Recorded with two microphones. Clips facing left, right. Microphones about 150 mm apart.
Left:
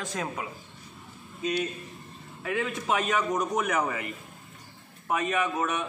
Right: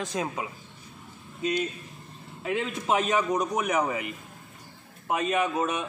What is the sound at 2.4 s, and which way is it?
A man's voice, 25° right (ahead or behind).